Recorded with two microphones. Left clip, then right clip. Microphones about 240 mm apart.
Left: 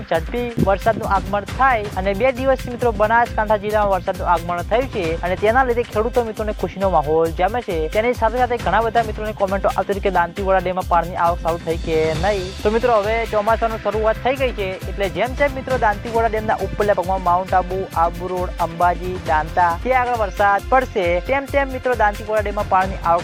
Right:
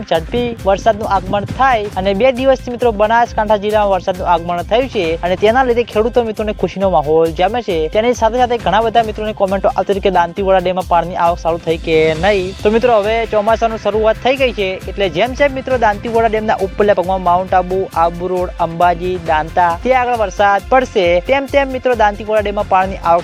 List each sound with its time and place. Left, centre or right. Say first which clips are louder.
0.1 s speech: right 5 dB; right